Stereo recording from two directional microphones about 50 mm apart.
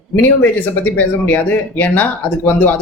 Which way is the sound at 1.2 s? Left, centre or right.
Left.